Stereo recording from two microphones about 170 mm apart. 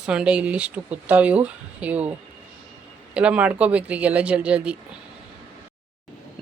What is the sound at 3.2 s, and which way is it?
Speech, 5° right (ahead or behind).